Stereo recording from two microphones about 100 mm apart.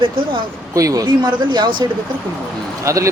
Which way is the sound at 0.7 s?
35° right (ahead or behind).